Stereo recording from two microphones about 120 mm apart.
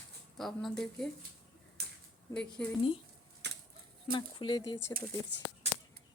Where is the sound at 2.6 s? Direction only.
10° left (ahead or behind).